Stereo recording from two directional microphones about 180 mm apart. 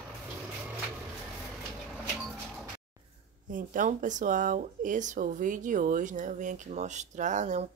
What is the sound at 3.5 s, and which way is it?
Speech, 50° right (ahead or behind).